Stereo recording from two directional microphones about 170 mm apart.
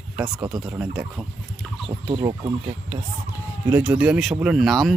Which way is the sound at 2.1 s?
25° right (ahead or behind).